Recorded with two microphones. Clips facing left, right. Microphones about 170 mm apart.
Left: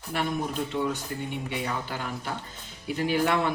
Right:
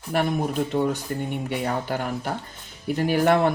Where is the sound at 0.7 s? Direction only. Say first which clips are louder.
Right 5 dB; 50° right (ahead or behind).